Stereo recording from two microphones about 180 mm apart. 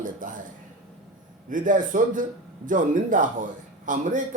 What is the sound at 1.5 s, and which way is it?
Speech, 45° right (ahead or behind).